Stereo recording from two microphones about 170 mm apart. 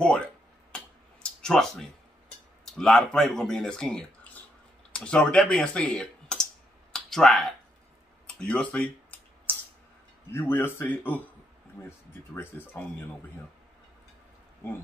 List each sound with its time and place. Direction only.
0.0 s a sound: 5° left (ahead or behind)
1.4 s speech: 5° left (ahead or behind)
6.9 s clicking: 5° left (ahead or behind)
8.4 s typing: 5° left (ahead or behind)
10.3 s speech: 10° left (ahead or behind)